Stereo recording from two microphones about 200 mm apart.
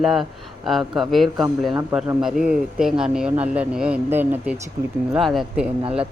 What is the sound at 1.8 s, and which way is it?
A woman's voice, 10° right (ahead or behind).